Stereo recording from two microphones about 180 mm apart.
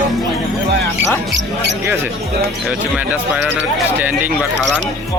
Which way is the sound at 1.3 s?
75° right (ahead or behind).